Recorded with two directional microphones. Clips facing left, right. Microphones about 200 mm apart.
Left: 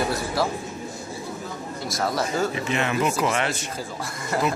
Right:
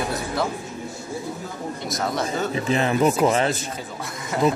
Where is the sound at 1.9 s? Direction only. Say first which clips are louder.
Left 1 dB; centre (ahead or behind).